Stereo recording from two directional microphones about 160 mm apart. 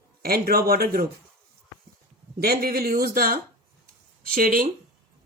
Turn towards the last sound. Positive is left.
turn(degrees=-65)  # may be behind; listen again after turning